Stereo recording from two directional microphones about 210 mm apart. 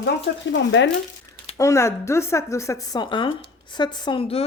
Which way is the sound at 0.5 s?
60° left (ahead or behind).